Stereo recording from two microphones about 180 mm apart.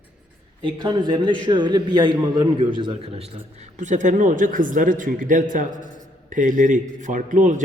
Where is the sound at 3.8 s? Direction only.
45° right (ahead or behind).